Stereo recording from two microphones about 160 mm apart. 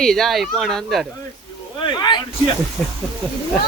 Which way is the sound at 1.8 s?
30° left (ahead or behind).